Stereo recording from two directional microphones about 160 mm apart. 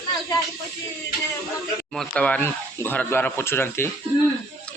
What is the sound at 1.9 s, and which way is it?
A man's voice, 5° left (ahead or behind).